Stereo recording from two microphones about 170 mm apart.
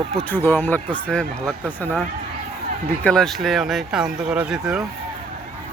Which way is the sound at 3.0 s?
5° left (ahead or behind).